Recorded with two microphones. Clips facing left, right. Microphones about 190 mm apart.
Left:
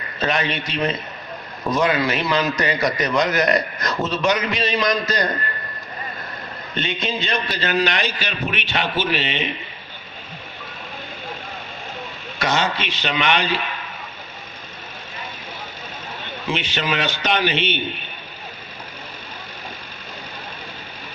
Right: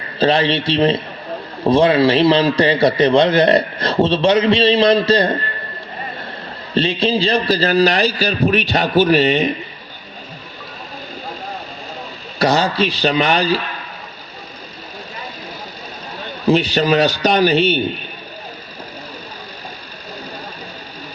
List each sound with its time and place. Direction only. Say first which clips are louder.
0.2 s a man's voice: right 8 dB; 30° right (ahead or behind)
6.7 s a man's voice: right 9 dB; 30° right (ahead or behind)
12.4 s a man's voice: right 7 dB; 35° right (ahead or behind)
16.2 s a man's voice: right 11 dB; 40° right (ahead or behind)